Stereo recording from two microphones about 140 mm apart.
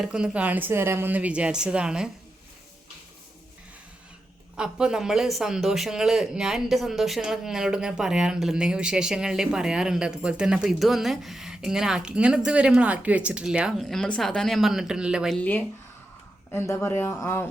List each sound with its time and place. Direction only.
0.0 s speech: 5° right (ahead or behind)
4.5 s a man's voice: 5° right (ahead or behind)
15.4 s speech: 10° left (ahead or behind)